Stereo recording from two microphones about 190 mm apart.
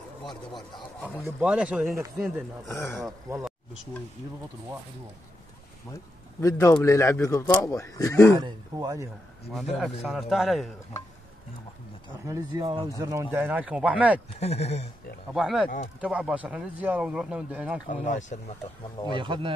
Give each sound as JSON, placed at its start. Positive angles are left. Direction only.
{"t": 0.3, "sound": "speech", "side_deg": 25}
{"t": 1.2, "sound": "a man's voice", "side_deg": -5}
{"t": 6.4, "sound": "speech", "side_deg": 15}
{"t": 8.3, "sound": "speech", "side_deg": -20}
{"t": 9.8, "sound": "a man's voice", "side_deg": 0}
{"t": 12.3, "sound": "speech", "side_deg": -20}
{"t": 14.4, "sound": "speech", "side_deg": 35}
{"t": 15.3, "sound": "a man's voice", "side_deg": 0}
{"t": 17.8, "sound": "speech", "side_deg": 40}
{"t": 19.0, "sound": "speech", "side_deg": -25}